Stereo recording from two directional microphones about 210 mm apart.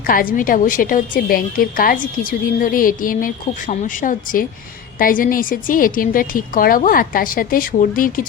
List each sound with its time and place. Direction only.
0.1 s a woman's voice: 40° left (ahead or behind)